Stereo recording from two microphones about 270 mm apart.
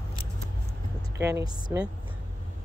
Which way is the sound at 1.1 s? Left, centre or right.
Centre.